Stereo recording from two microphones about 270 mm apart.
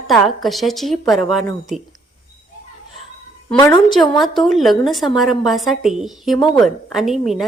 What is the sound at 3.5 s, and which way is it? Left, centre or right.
Speech, centre.